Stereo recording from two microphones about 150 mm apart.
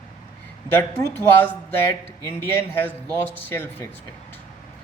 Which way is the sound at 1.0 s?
15° left (ahead or behind).